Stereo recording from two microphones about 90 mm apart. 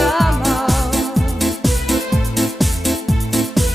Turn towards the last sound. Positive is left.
turn(degrees=0)  # may be behind; listen again after turning